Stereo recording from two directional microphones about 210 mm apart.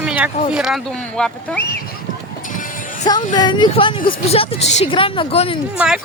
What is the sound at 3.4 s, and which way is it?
Speech, 20° left (ahead or behind).